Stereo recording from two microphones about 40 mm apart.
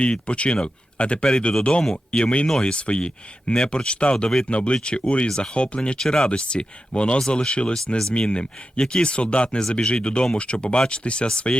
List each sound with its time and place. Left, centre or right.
0.0 s speech: left
6.0 s speech: centre